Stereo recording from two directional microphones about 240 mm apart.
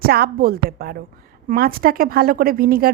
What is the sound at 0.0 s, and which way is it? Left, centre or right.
A woman's voice, right.